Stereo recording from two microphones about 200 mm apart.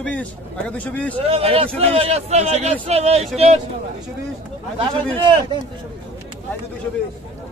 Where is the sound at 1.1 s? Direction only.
30° right (ahead or behind).